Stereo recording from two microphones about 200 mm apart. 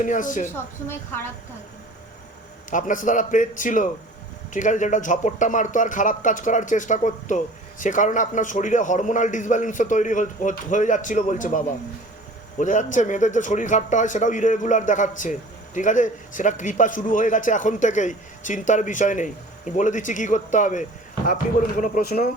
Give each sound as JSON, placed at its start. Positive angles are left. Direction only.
{"t": 0.0, "sound": "a man's voice", "side_deg": 40}
{"t": 0.5, "sound": "a woman's voice", "side_deg": 10}
{"t": 2.6, "sound": "a man's voice", "side_deg": 40}